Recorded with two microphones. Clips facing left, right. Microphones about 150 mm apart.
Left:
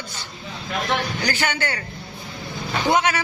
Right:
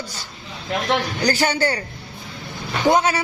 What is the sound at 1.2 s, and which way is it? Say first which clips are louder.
Speech: right 8 dB; 35° right (ahead or behind).